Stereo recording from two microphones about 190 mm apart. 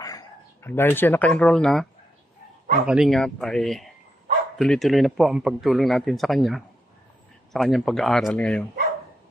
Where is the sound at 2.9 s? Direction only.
Centre (ahead or behind).